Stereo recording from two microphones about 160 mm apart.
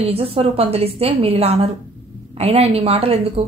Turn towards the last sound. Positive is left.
turn(degrees=-40)  # may be behind; listen again after turning